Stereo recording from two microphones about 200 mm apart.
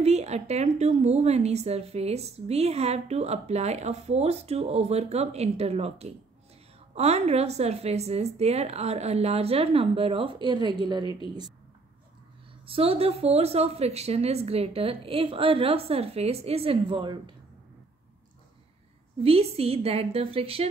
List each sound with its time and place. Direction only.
0.0 s a woman's voice: 35° right (ahead or behind)
12.6 s speech: 30° right (ahead or behind)
19.2 s speech: 30° right (ahead or behind)